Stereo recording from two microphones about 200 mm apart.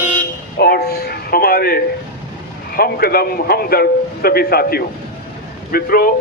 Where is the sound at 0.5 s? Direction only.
50° left (ahead or behind).